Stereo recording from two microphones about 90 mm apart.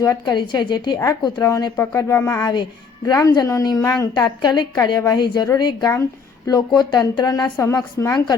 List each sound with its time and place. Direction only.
0.0 s speech: 40° left (ahead or behind)
0.3 s a woman's voice: 55° left (ahead or behind)
1.0 s speech: 40° left (ahead or behind)
2.4 s speech: 50° left (ahead or behind)
3.1 s speech: 40° left (ahead or behind)
4.1 s speech: 55° left (ahead or behind)
5.9 s a sound: 30° left (ahead or behind)
6.5 s speech: 50° left (ahead or behind)